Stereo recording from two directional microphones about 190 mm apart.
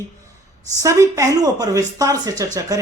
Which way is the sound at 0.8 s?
15° right (ahead or behind).